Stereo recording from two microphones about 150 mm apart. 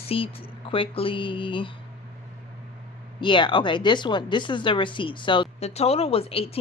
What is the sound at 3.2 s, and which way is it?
Speech, 30° left (ahead or behind).